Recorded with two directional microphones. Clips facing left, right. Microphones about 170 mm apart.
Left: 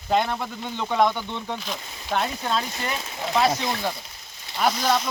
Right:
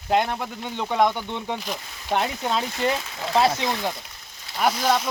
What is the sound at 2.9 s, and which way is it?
Speech, 30° right (ahead or behind).